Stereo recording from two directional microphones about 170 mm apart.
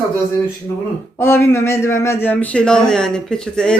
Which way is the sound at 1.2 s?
15° left (ahead or behind).